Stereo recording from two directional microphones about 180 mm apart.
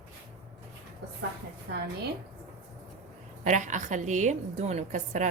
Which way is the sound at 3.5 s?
45° right (ahead or behind).